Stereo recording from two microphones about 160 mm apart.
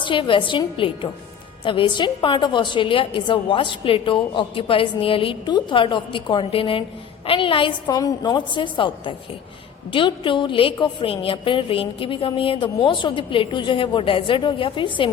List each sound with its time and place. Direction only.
0.0 s a woman's voice: 30° left (ahead or behind)